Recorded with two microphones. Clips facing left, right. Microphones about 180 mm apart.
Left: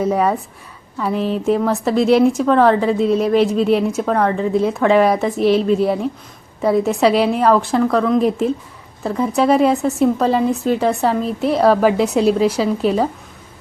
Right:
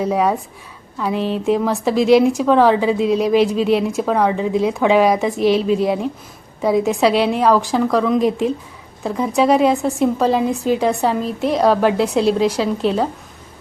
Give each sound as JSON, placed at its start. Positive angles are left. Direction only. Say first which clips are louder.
{"t": 0.0, "sound": "a woman's voice", "louder": "left 1 dB", "side_deg": -10}
{"t": 0.9, "sound": "a woman's voice", "louder": "left 1 dB", "side_deg": 0}